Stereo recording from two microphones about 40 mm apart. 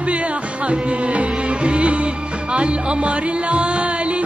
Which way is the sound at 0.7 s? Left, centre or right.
Right.